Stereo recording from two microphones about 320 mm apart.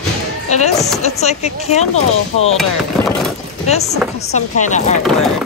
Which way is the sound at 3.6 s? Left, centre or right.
Centre.